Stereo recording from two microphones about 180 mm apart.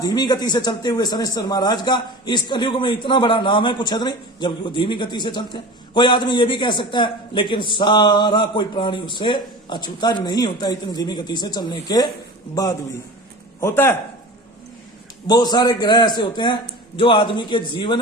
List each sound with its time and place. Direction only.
0.0 s speech: 20° left (ahead or behind)
13.6 s a man's voice: 15° left (ahead or behind)
15.3 s speech: 20° left (ahead or behind)